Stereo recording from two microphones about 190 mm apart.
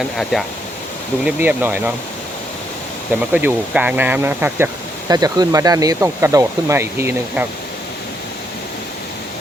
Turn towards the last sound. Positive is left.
turn(degrees=-15)  # may be behind; listen again after turning